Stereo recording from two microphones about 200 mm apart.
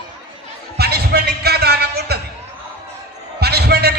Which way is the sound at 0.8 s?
55° right (ahead or behind).